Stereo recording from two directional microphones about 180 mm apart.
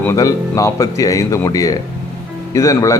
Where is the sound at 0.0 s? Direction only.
15° left (ahead or behind).